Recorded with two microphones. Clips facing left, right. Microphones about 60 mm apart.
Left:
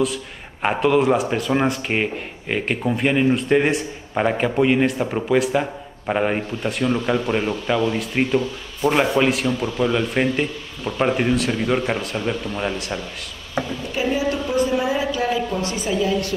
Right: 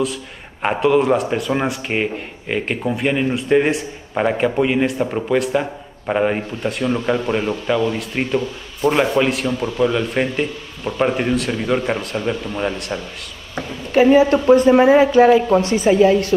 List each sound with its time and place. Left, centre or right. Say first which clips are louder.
0.0 s a man's voice: even; centre
13.9 s speech: right 10 dB; right